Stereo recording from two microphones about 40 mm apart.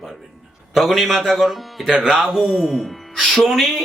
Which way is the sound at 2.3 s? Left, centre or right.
Centre.